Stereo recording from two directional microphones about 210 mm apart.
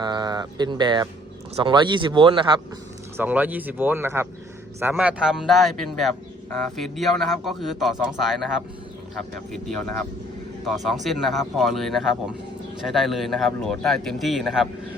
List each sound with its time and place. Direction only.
0.0 s speech: 20° right (ahead or behind)
3.2 s a man's voice: 10° right (ahead or behind)
11.0 s a man's voice: centre (ahead or behind)